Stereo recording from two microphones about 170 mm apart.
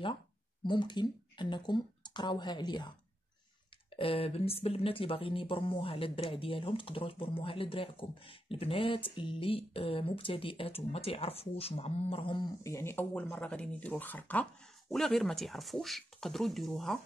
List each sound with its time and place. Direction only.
0.7 s speech: 25° left (ahead or behind)
3.9 s speech: 35° left (ahead or behind)
12.6 s speech: 15° left (ahead or behind)